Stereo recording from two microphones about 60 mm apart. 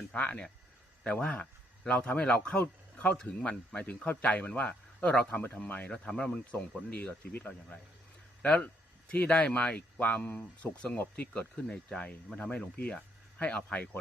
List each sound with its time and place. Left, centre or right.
0.1 s a man's voice: centre
2.6 s a sound: left
3.8 s speech: left
5.9 s speech: centre
11.7 s a man's voice: centre